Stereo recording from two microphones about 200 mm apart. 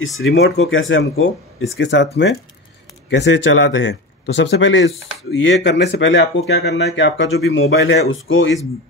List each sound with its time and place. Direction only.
0.0 s speech: 75° left (ahead or behind)
3.1 s speech: 65° left (ahead or behind)